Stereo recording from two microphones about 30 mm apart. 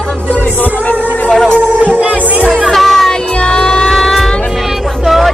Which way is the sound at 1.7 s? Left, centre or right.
Right.